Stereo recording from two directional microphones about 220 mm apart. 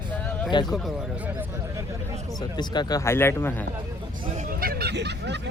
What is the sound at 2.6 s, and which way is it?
Speech, 20° left (ahead or behind).